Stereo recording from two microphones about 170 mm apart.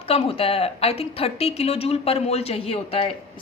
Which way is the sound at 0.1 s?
35° left (ahead or behind).